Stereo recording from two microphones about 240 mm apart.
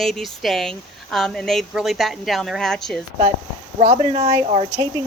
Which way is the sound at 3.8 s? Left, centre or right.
Right.